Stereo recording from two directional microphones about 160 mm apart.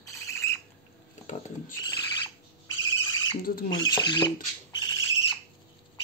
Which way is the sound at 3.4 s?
65° left (ahead or behind).